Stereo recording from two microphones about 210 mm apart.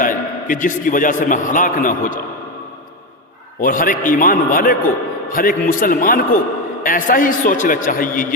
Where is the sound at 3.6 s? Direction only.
40° left (ahead or behind).